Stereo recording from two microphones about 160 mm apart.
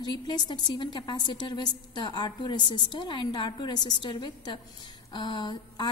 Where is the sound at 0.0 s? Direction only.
25° left (ahead or behind).